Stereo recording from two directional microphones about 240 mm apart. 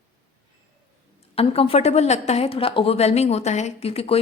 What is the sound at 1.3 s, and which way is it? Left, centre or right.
A woman's voice, left.